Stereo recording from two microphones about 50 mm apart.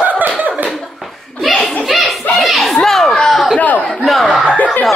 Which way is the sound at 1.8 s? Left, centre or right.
Centre.